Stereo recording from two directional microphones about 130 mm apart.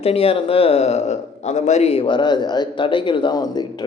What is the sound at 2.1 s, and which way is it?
A man's voice, 35° left (ahead or behind).